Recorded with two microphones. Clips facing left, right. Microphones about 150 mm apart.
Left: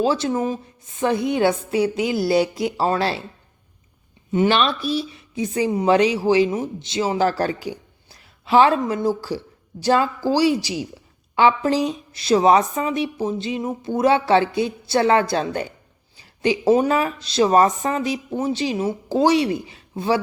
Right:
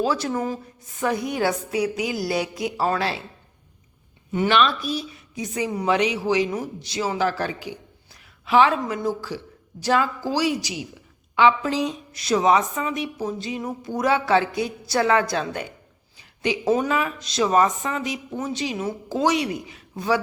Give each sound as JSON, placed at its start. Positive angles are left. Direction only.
{"t": 0.0, "sound": "speech", "side_deg": 25}
{"t": 4.3, "sound": "a woman's voice", "side_deg": 30}